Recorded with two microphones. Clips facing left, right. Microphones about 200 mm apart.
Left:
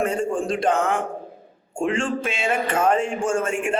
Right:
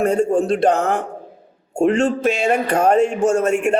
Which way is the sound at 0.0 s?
40° right (ahead or behind).